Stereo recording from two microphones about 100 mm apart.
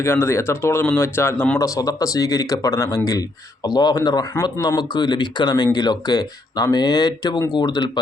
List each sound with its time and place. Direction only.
0.0 s speech: 25° left (ahead or behind); by 7.9 s 45° left (ahead or behind)